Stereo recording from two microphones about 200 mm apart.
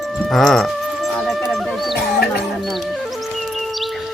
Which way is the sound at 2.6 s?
Centre (ahead or behind).